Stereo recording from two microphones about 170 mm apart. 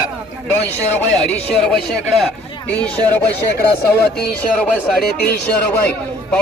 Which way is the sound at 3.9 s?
70° left (ahead or behind).